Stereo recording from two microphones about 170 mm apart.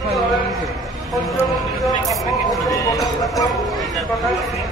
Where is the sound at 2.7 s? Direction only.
20° left (ahead or behind).